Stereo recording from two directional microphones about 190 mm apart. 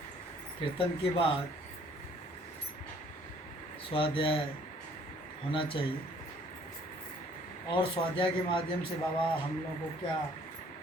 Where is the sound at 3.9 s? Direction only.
25° left (ahead or behind).